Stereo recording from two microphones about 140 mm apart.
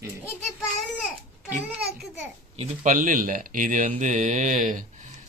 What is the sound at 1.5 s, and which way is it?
Speech, 10° right (ahead or behind).